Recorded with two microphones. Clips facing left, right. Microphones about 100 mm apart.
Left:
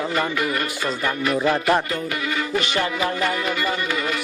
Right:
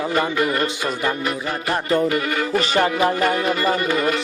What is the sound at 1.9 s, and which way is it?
Music, 45° right (ahead or behind).